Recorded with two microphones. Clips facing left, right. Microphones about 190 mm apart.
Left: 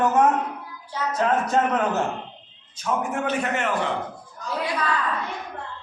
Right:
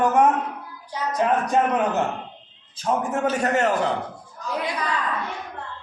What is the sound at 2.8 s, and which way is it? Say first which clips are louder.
A man's voice: right 2 dB; 40° right (ahead or behind).